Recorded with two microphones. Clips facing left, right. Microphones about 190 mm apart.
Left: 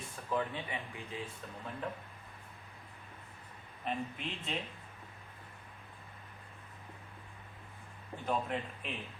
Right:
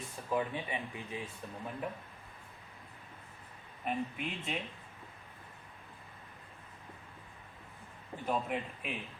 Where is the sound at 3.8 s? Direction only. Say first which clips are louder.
Right 2 dB; 10° right (ahead or behind).